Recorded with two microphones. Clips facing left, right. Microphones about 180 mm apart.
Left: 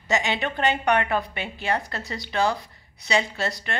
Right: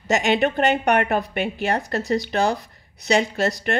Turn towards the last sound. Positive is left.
turn(degrees=-45)  # may be behind; listen again after turning